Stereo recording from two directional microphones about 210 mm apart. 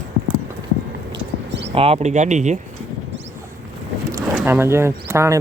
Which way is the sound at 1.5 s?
55° right (ahead or behind).